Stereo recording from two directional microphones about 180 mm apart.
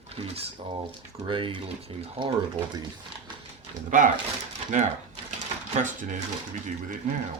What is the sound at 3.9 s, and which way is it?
Speech, 45° right (ahead or behind).